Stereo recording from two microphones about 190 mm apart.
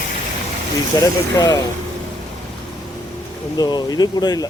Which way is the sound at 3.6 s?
20° left (ahead or behind).